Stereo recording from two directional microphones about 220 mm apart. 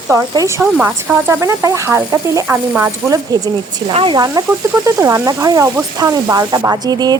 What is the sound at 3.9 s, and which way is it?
Speech, 25° right (ahead or behind).